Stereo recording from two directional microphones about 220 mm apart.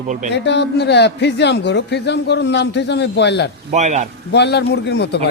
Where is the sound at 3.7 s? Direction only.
30° right (ahead or behind).